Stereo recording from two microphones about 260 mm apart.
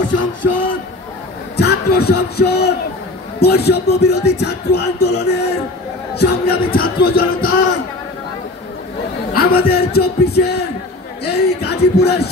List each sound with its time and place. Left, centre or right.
0.0 s a sound: left
1.6 s a man's voice: left
3.3 s music: left
9.3 s music: left